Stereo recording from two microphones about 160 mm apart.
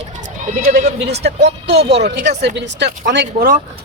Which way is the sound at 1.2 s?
90° right.